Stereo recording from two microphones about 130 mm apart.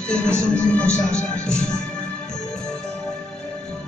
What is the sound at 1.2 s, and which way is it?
Music, 5° left (ahead or behind).